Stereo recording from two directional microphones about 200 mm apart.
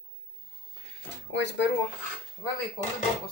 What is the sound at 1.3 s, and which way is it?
Speech, 65° left (ahead or behind).